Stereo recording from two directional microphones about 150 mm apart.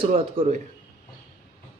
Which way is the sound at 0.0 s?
40° right (ahead or behind).